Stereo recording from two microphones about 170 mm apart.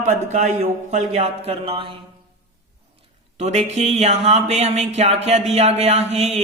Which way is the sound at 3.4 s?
40° right (ahead or behind).